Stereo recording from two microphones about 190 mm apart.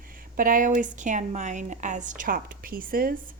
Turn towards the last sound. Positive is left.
turn(degrees=-50)  # may be behind; listen again after turning